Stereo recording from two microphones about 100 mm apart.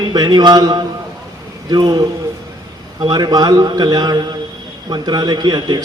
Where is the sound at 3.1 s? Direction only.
45° right (ahead or behind).